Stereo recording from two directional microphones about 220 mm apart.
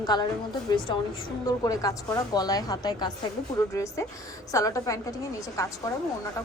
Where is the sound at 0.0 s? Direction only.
20° left (ahead or behind).